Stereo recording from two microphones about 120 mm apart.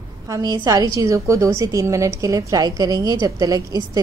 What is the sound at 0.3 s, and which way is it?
A woman's voice, 30° right (ahead or behind).